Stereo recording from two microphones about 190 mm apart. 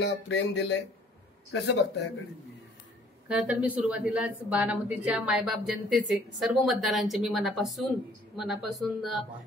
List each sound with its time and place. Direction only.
0.0 s speech: 65° left (ahead or behind)
3.3 s a woman's voice: 5° right (ahead or behind)